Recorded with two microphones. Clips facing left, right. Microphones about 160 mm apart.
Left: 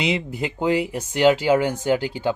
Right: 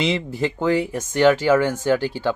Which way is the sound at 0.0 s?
15° left (ahead or behind).